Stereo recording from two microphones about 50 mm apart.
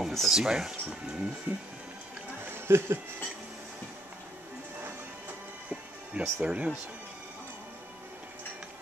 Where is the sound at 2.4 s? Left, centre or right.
Right.